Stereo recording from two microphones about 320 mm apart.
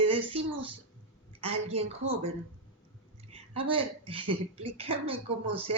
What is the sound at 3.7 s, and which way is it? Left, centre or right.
Speech, centre.